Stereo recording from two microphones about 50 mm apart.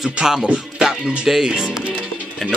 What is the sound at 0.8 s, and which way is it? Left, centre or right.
Speech, centre.